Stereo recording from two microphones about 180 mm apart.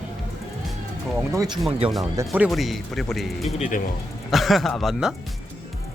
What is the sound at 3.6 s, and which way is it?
Speech, 45° left (ahead or behind).